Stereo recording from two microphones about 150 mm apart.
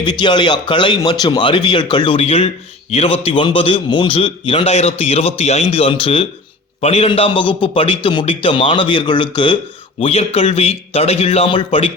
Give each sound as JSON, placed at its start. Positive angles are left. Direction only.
{"t": 0.0, "sound": "a man's voice", "side_deg": 30}